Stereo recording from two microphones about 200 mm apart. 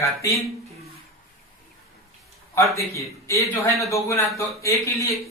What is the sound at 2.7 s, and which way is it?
Speech, 15° right (ahead or behind).